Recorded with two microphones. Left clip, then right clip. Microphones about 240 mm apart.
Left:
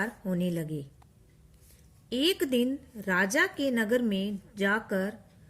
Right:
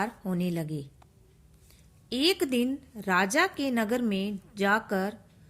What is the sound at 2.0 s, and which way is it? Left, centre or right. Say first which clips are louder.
A woman's voice: right 1 dB; right.